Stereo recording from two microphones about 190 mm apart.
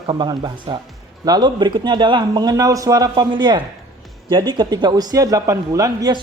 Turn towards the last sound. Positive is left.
turn(degrees=-20)  # may be behind; listen again after turning